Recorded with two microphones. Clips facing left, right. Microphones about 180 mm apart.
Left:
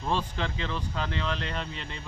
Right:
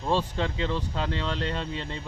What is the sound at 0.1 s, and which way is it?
Speech, 30° right (ahead or behind).